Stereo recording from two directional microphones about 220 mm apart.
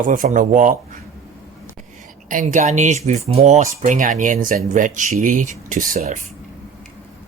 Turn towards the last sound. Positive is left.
turn(degrees=-35)  # may be behind; listen again after turning